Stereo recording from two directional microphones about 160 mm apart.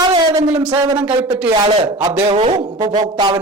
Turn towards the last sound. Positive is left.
turn(degrees=-25)  # may be behind; listen again after turning